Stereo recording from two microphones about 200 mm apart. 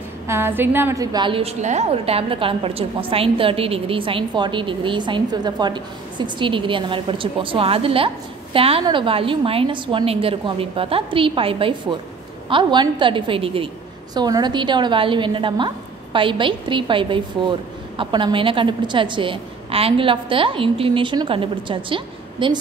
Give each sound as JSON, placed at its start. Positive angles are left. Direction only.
{"t": 0.3, "sound": "a woman's voice", "side_deg": -10}